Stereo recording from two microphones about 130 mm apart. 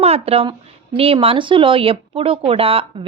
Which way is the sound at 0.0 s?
50° right (ahead or behind).